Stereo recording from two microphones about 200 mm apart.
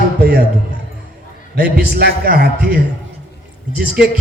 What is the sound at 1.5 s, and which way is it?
A man's voice, 50° right (ahead or behind).